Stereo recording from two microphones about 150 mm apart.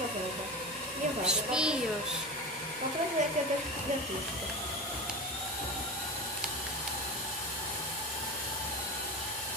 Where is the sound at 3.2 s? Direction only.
55° right (ahead or behind).